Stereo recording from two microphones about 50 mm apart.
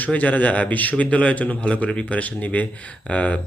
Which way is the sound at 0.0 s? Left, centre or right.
Left.